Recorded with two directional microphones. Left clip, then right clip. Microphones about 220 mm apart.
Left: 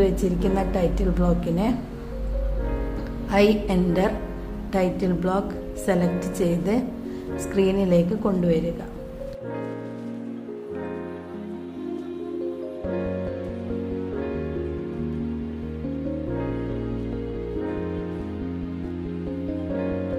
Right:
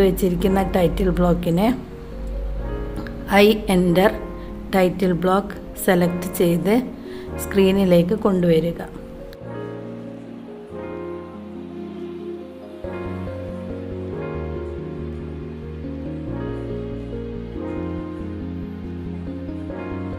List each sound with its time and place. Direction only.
0.0 s a woman's voice: 25° right (ahead or behind)
3.3 s a woman's voice: 30° right (ahead or behind)